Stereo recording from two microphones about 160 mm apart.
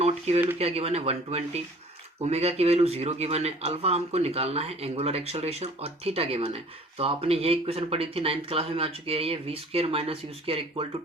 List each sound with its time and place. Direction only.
0.0 s speech: 40° right (ahead or behind)